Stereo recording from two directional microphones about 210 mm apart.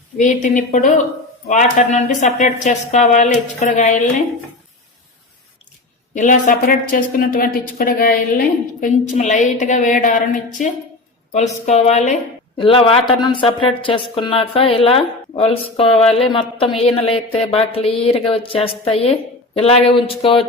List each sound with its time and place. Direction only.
0.2 s speech: 35° left (ahead or behind)
6.1 s a woman's voice: 35° left (ahead or behind)